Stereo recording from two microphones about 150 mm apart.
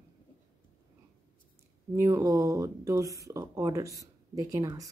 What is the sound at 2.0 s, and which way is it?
Speech, 20° right (ahead or behind).